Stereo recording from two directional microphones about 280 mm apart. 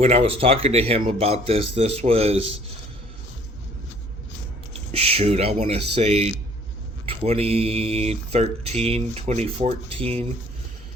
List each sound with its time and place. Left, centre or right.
0.0 s speech: right
4.7 s speech: right